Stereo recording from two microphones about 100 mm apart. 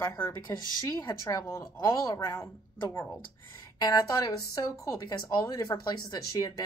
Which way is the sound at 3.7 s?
40° left (ahead or behind).